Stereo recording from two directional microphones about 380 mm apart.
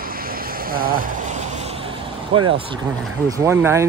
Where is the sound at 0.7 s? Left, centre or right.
Right.